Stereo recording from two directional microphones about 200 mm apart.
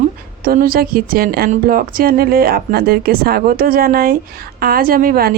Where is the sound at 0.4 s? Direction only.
45° right (ahead or behind).